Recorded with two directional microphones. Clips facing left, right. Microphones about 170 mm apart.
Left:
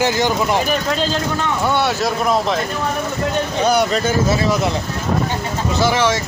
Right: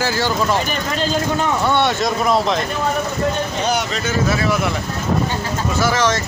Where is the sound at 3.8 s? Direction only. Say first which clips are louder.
Left 6 dB; 35° left (ahead or behind).